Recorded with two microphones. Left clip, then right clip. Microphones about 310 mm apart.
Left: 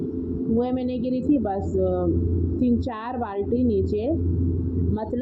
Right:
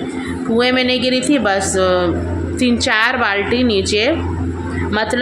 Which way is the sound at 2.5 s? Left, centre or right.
Centre.